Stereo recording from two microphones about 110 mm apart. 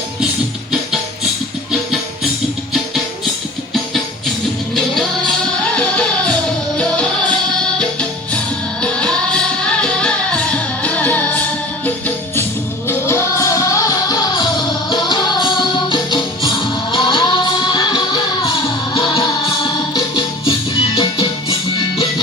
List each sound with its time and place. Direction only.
4.7 s music: 5° left (ahead or behind)
8.8 s music: 10° left (ahead or behind); by 21.2 s 45° left (ahead or behind)